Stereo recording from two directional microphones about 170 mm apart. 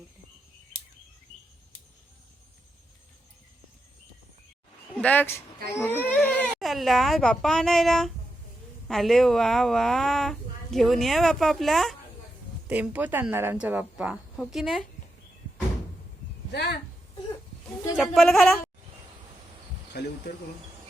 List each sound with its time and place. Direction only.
4.9 s a woman's voice: 10° left (ahead or behind)
16.5 s speech: 75° left (ahead or behind)
17.9 s a woman's voice: centre (ahead or behind)